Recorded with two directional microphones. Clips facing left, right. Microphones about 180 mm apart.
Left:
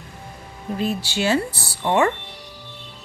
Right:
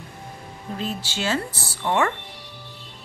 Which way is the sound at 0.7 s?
10° left (ahead or behind).